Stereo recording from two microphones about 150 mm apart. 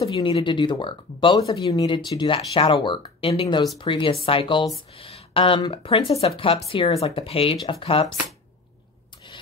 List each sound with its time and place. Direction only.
0.1 s speech: 35° left (ahead or behind)